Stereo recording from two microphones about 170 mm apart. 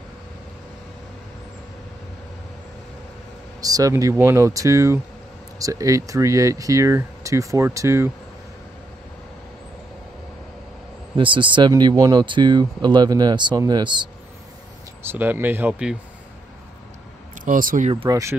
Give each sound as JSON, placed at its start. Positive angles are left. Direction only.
{"t": 3.6, "sound": "speech", "side_deg": -20}
{"t": 11.1, "sound": "speech", "side_deg": -30}
{"t": 15.0, "sound": "speech", "side_deg": -10}
{"t": 17.5, "sound": "speech", "side_deg": -50}
{"t": 18.0, "sound": "speech", "side_deg": -15}